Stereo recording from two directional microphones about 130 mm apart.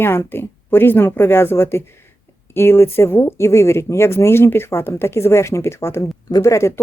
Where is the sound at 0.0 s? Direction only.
15° left (ahead or behind).